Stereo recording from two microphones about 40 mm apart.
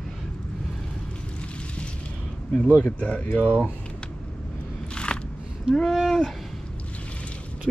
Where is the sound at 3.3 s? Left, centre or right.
Left.